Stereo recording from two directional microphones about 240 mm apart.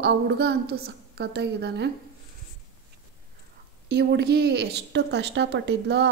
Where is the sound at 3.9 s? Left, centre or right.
Right.